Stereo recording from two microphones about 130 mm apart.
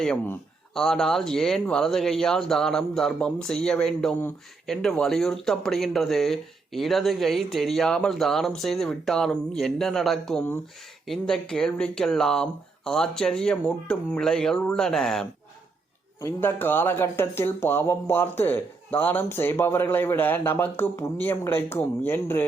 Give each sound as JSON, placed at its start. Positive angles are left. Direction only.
{"t": 0.7, "sound": "speech", "side_deg": 5}
{"t": 16.2, "sound": "speech", "side_deg": 15}